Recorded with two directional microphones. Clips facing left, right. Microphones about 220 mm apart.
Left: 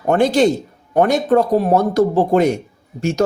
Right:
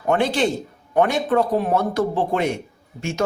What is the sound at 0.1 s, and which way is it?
Speech, 40° left (ahead or behind).